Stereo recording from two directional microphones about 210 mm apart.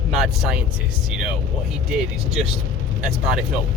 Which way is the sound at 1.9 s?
Centre (ahead or behind).